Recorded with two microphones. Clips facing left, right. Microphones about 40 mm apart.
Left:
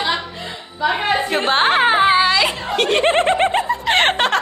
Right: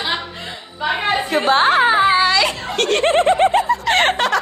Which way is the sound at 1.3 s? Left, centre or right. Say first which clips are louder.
Right 4 dB; left.